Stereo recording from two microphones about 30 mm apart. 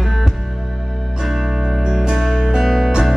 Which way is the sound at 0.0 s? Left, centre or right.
Centre.